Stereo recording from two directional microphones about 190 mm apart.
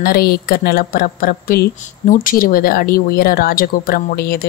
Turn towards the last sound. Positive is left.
turn(degrees=50)  # may be behind; listen again after turning